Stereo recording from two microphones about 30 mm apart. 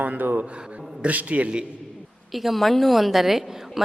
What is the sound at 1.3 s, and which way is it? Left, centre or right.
Speech, right.